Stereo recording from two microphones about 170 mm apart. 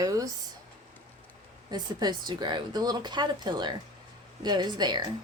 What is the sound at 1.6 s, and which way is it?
Speech, 25° right (ahead or behind).